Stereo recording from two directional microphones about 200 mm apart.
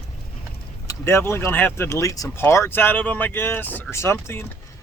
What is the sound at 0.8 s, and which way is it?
Speech, 15° left (ahead or behind).